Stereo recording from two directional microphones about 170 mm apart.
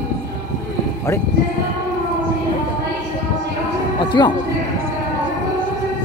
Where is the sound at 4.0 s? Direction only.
25° left (ahead or behind).